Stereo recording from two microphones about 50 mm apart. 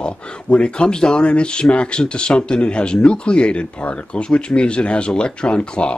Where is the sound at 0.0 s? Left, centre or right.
Centre.